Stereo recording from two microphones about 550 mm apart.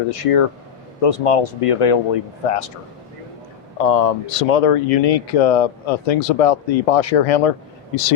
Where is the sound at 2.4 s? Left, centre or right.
Left.